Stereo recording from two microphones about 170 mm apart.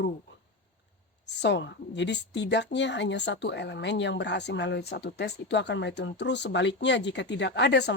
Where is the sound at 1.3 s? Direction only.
90° left.